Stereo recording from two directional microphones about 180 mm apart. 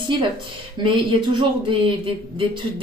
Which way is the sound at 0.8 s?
30° right (ahead or behind).